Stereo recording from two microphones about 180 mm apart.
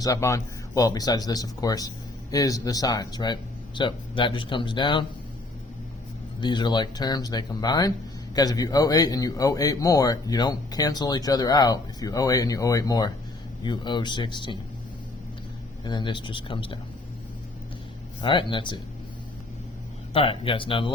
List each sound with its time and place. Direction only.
0.0 s speech: 20° left (ahead or behind)
6.4 s speech: 25° left (ahead or behind)
15.8 s speech: 25° left (ahead or behind)
18.2 s speech: 25° left (ahead or behind)
20.1 s speech: 30° left (ahead or behind)